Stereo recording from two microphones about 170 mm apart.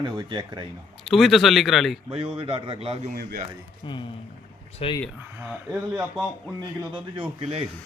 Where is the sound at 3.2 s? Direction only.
65° right (ahead or behind).